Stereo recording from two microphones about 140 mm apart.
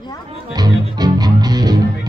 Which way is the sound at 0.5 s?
30° right (ahead or behind).